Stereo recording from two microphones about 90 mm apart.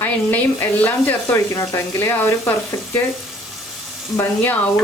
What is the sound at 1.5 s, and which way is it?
Speech, 35° left (ahead or behind).